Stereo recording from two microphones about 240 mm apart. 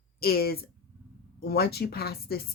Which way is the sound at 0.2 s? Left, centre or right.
Left.